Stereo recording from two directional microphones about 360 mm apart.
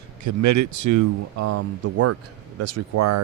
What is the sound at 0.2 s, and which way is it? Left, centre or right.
Speech, right.